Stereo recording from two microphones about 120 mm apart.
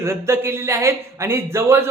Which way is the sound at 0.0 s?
20° right (ahead or behind).